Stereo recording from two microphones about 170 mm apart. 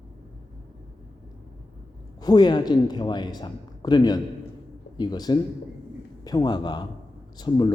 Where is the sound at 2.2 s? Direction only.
25° left (ahead or behind).